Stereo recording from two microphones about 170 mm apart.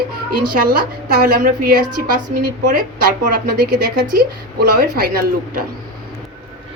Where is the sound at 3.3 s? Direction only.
65° right (ahead or behind).